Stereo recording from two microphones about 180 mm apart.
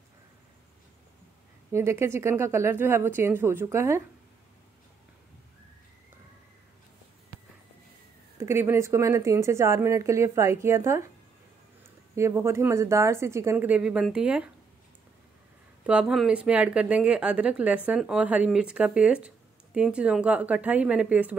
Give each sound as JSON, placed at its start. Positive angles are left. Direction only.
{"t": 1.7, "sound": "speech", "side_deg": -15}
{"t": 8.4, "sound": "speech", "side_deg": -15}
{"t": 12.2, "sound": "speech", "side_deg": -15}
{"t": 15.8, "sound": "speech", "side_deg": -5}